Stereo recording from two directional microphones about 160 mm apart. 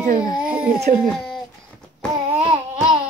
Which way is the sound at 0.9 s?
50° right (ahead or behind).